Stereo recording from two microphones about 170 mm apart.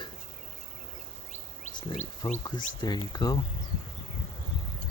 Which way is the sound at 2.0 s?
45° left (ahead or behind).